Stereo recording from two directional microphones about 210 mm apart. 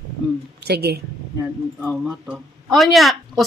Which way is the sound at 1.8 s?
5° left (ahead or behind).